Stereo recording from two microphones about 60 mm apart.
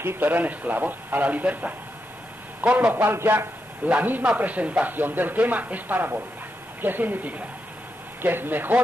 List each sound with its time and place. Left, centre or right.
0.0 s speech: right
0.3 s speech: right
3.1 s speech: right
3.3 s a man's voice: right